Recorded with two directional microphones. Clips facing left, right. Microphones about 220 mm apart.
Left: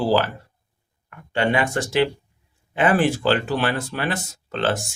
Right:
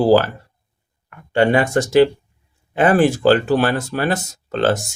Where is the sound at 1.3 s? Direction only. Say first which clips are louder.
Right 6 dB; 45° right (ahead or behind).